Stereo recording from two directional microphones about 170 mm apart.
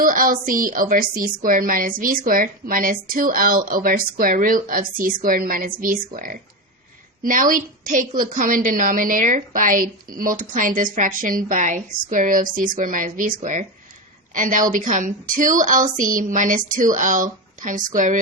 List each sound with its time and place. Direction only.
0.0 s a woman's voice: 55° right (ahead or behind)